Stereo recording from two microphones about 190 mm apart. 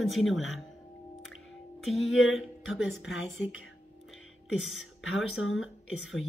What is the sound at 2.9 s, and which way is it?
Speech, 90° left.